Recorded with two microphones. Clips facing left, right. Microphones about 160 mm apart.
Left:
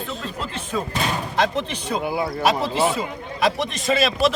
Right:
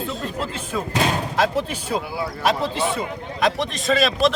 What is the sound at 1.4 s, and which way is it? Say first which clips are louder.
Speech: even; 5° right (ahead or behind).